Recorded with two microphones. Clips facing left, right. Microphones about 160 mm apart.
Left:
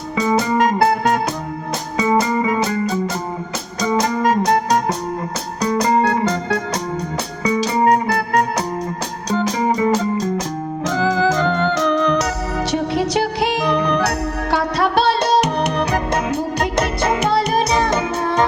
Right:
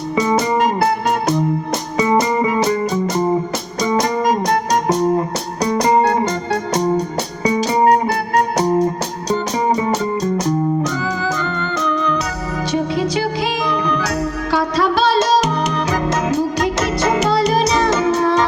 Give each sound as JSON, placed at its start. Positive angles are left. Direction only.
{"t": 10.8, "sound": "music", "side_deg": 90}